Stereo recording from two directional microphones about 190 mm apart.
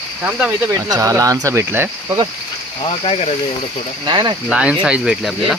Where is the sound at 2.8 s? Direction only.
30° left (ahead or behind).